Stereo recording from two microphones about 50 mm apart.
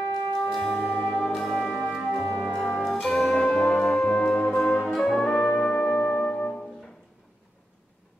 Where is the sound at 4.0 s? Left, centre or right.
Centre.